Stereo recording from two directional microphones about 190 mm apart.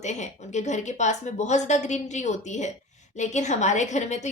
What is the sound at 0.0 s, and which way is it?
A woman's voice, 40° left (ahead or behind).